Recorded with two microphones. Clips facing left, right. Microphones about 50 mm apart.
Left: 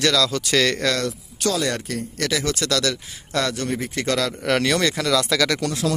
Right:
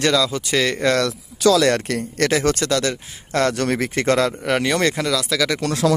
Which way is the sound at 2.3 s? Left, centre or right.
Right.